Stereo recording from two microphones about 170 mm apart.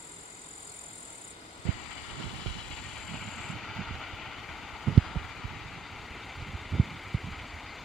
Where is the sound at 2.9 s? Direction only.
Centre (ahead or behind).